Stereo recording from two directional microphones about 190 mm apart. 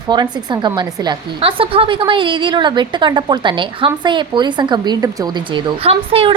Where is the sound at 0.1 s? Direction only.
25° right (ahead or behind).